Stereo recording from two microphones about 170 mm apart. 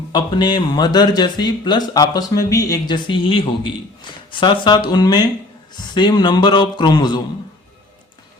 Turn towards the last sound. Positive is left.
turn(degrees=25)  # may be behind; listen again after turning